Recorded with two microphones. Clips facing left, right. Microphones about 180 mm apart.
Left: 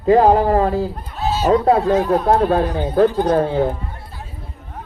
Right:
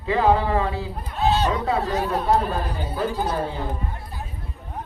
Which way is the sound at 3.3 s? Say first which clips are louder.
Left 10 dB; 65° left (ahead or behind).